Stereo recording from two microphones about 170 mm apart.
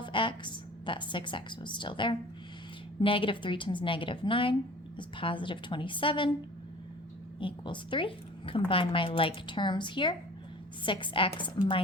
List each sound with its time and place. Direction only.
0.0 s a woman's voice: 30° left (ahead or behind)
7.3 s a woman's voice: 30° left (ahead or behind)